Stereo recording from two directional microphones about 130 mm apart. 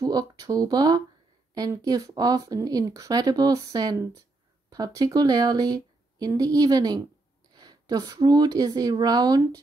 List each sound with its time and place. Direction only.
0.0 s speech: 30° right (ahead or behind)